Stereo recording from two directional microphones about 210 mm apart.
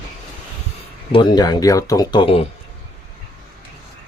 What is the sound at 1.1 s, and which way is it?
Speech, 20° left (ahead or behind).